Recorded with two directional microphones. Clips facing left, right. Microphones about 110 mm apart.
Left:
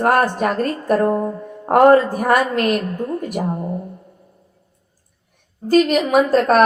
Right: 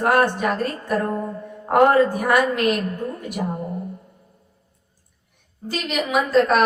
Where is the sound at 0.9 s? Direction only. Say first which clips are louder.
Left 8 dB; 40° left (ahead or behind).